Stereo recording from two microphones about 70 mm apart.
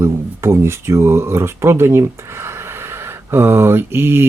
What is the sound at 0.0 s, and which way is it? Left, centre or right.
Mantra, right.